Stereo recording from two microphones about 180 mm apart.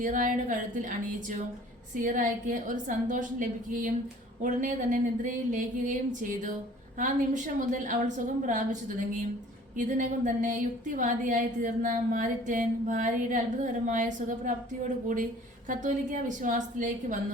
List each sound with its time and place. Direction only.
0.0 s a woman's voice: 45° right (ahead or behind)
15.7 s a woman's voice: 45° right (ahead or behind)